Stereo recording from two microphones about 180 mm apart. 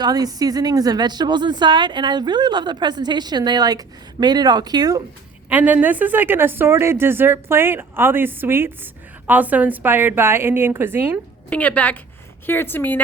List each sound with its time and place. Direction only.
0.0 s speech: 20° right (ahead or behind)
5.5 s speech: 10° right (ahead or behind)
11.4 s a woman's voice: 10° left (ahead or behind)